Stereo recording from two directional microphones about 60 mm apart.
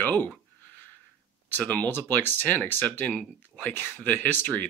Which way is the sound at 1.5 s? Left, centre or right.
Left.